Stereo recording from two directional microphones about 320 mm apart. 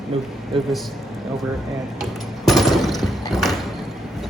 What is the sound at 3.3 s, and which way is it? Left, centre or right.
Clip-clop, centre.